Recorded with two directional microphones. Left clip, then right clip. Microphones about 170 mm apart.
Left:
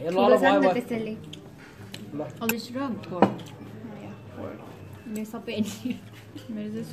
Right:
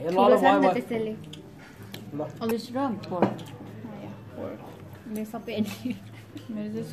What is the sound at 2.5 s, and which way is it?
Speech, 30° right (ahead or behind).